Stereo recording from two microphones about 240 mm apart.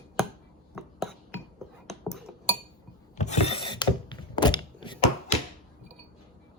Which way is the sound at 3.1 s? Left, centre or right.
Left.